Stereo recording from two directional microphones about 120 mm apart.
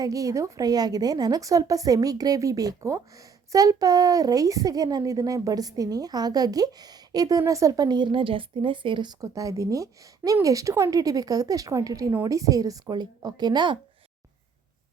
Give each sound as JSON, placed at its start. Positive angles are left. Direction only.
{"t": 0.0, "sound": "a woman's voice", "side_deg": -30}
{"t": 9.2, "sound": "a woman's voice", "side_deg": -25}